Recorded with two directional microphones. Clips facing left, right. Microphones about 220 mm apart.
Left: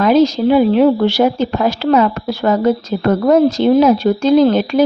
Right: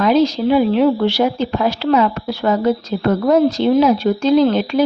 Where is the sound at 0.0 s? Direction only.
45° left (ahead or behind).